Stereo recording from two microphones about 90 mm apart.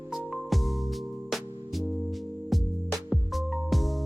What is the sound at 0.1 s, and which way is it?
Music, centre (ahead or behind).